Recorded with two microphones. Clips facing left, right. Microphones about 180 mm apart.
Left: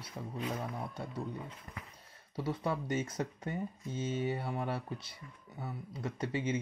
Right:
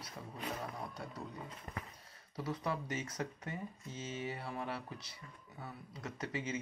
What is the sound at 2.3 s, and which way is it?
Speech, 30° left (ahead or behind).